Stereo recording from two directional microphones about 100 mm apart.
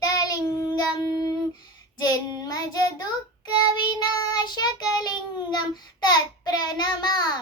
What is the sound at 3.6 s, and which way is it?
Child singing, 45° left (ahead or behind).